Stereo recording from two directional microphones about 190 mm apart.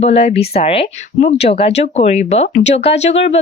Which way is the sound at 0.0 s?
35° left (ahead or behind).